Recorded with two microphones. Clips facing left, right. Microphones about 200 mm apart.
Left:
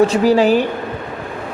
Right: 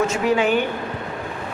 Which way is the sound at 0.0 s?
35° left (ahead or behind).